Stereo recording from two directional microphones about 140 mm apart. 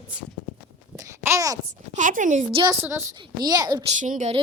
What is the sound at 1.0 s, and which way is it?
Babbling, 20° right (ahead or behind).